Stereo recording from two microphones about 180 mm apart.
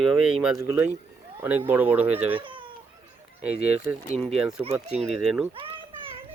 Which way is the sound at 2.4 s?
30° right (ahead or behind).